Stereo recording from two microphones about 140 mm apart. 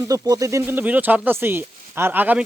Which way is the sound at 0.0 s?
25° right (ahead or behind).